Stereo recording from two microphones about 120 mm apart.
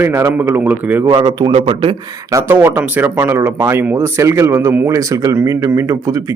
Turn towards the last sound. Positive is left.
turn(degrees=-25)  # may be behind; listen again after turning